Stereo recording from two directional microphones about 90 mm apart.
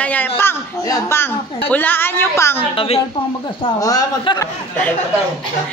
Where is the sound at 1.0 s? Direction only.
25° left (ahead or behind).